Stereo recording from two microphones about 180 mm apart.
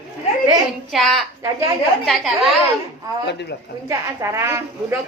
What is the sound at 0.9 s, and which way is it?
Speech, centre (ahead or behind).